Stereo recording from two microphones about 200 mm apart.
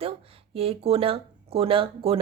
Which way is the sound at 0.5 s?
30° right (ahead or behind).